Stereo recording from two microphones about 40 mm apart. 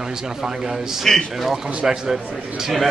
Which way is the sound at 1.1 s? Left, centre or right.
Centre.